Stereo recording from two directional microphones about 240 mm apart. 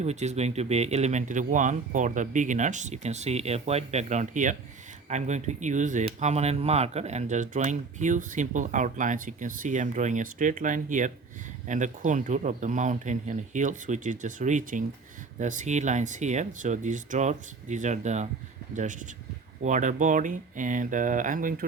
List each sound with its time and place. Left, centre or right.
0.0 s speech: right